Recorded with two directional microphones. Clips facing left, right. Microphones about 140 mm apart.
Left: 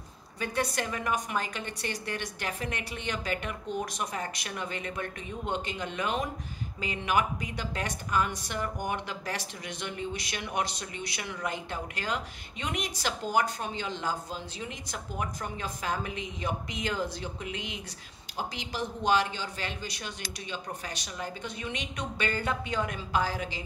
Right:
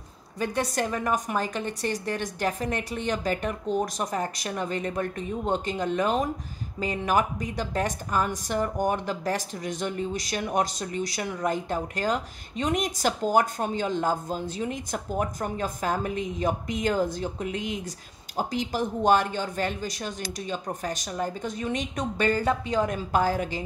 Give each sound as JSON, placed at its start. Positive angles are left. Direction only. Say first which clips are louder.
{"t": 0.4, "sound": "a woman's voice", "louder": "right 4 dB", "side_deg": -40}